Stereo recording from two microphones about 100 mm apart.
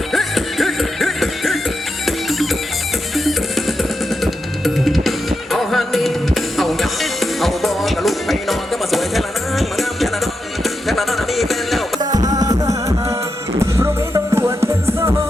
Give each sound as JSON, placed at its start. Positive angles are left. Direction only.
{"t": 0.1, "sound": "music", "side_deg": 0}
{"t": 12.1, "sound": "music", "side_deg": -40}